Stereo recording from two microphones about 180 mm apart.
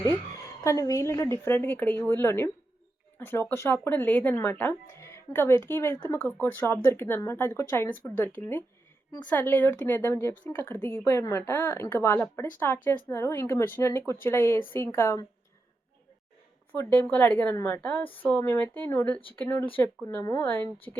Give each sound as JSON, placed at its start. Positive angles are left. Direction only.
{"t": 0.6, "sound": "speech", "side_deg": 15}
{"t": 16.7, "sound": "speech", "side_deg": 10}
{"t": 20.9, "sound": "speech", "side_deg": -25}